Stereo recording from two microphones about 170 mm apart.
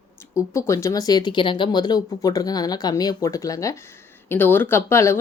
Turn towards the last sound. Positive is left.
turn(degrees=15)  # may be behind; listen again after turning